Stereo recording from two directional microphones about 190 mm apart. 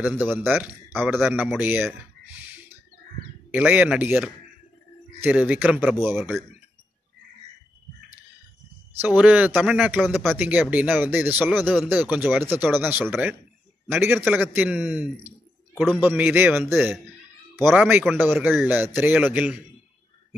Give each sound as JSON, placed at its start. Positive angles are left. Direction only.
{"t": 0.0, "sound": "speech", "side_deg": -10}
{"t": 3.5, "sound": "speech", "side_deg": -10}
{"t": 9.0, "sound": "speech", "side_deg": -10}